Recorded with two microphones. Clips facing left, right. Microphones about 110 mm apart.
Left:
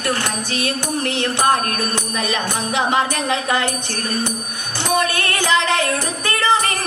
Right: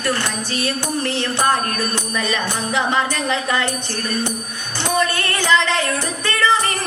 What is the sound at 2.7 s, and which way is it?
Music, 20° left (ahead or behind).